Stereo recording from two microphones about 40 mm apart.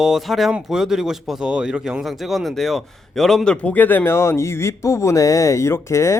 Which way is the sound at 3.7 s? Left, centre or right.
Left.